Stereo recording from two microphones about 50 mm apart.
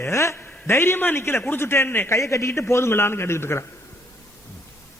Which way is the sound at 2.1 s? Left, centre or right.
Left.